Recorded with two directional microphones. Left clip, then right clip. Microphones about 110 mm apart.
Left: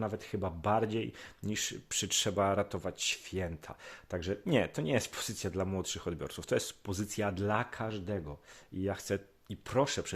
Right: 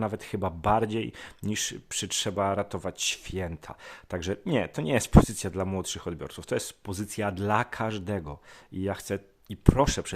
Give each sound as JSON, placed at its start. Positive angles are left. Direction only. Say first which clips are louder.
{"t": 0.0, "sound": "speech", "louder": "right 6 dB", "side_deg": -45}
{"t": 1.9, "sound": "speech", "louder": "even", "side_deg": -30}
{"t": 2.7, "sound": "speech", "louder": "right 4 dB", "side_deg": -45}
{"t": 4.4, "sound": "speech", "louder": "right 1 dB", "side_deg": -25}
{"t": 4.8, "sound": "speech", "louder": "right 10 dB", "side_deg": -40}
{"t": 7.9, "sound": "speech", "louder": "right 6 dB", "side_deg": -65}
{"t": 8.8, "sound": "speech", "louder": "right 3 dB", "side_deg": -35}
{"t": 9.6, "sound": "speech", "louder": "right 7 dB", "side_deg": -55}